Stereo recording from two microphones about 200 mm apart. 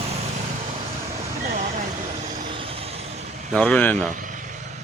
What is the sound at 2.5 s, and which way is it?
Vehicle, 25° right (ahead or behind).